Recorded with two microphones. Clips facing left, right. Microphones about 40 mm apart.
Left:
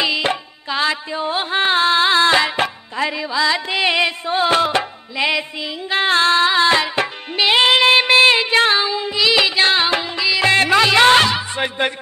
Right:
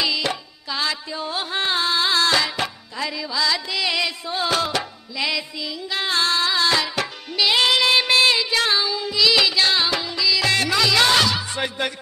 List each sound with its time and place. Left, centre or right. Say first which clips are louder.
0.0 s music: left 4 dB; left